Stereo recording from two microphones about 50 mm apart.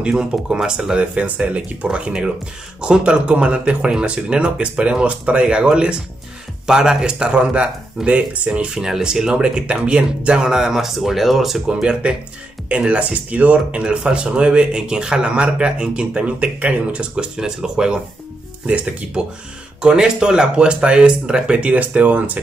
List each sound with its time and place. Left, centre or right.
0.0 s speech: centre
1.1 s speech: right; by 11.6 s centre
11.6 s speech: centre
18.7 s speech: right
19.8 s speech: centre; by 22.4 s right